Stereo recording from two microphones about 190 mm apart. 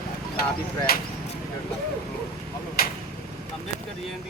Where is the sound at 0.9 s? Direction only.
55° left (ahead or behind).